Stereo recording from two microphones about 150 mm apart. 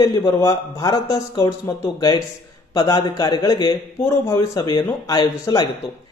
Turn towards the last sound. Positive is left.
turn(degrees=25)  # may be behind; listen again after turning